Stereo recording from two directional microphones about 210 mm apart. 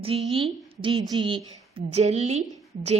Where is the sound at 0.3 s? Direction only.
25° right (ahead or behind).